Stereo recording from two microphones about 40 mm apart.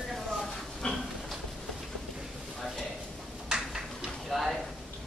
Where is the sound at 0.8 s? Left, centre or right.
Left.